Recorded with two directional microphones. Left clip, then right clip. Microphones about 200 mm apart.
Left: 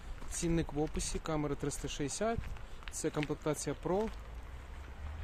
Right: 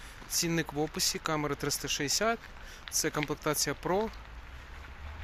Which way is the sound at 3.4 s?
10° right (ahead or behind).